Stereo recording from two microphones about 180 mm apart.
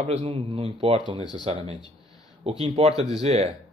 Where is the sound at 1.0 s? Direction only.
25° left (ahead or behind).